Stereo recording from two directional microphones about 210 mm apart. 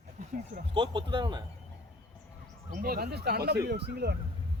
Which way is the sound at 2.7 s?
45° right (ahead or behind).